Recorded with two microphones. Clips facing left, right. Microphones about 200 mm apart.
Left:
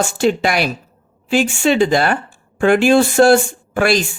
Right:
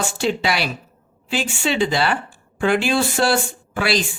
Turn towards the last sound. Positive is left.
turn(degrees=50)  # may be behind; listen again after turning